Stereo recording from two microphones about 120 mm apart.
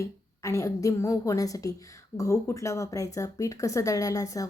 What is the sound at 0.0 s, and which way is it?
Speech, 25° left (ahead or behind).